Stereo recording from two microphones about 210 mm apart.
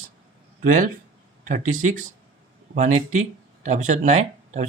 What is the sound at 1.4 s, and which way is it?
Speech, 40° right (ahead or behind).